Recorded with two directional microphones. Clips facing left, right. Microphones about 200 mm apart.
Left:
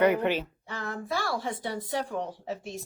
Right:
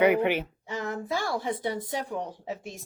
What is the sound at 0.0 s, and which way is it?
A woman's voice, 10° right (ahead or behind).